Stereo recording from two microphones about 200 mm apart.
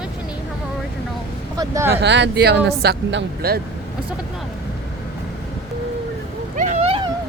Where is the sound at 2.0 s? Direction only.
60° right (ahead or behind).